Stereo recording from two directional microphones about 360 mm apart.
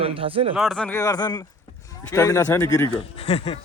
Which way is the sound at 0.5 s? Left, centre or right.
Centre.